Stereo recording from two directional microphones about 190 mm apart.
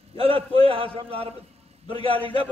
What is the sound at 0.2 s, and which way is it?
A man's voice, 25° right (ahead or behind).